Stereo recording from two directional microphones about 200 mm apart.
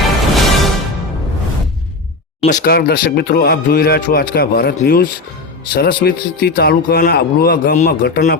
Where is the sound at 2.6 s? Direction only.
50° left (ahead or behind).